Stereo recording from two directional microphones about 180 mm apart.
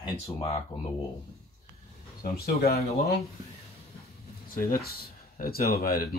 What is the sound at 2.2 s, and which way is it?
Speech, 55° left (ahead or behind).